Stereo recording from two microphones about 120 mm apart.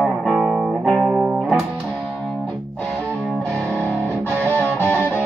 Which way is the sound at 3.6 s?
20° right (ahead or behind).